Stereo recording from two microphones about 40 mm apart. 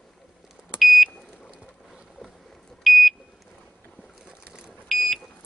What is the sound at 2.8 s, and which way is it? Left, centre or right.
Smoke detector, centre.